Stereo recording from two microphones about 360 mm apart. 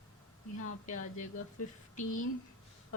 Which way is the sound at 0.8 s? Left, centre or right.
Left.